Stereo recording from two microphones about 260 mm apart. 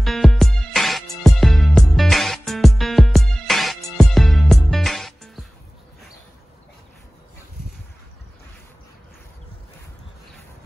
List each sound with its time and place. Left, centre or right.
0.0 s music: centre